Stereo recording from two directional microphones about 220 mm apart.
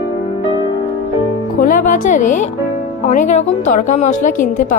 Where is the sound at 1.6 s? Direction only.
35° left (ahead or behind).